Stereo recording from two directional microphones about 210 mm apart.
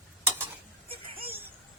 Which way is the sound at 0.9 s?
25° right (ahead or behind).